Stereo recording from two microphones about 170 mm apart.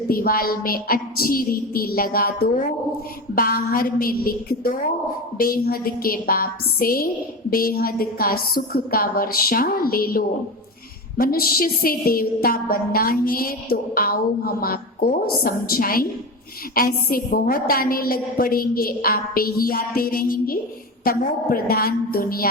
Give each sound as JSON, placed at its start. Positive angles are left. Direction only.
{"t": 0.1, "sound": "a woman's voice", "side_deg": 60}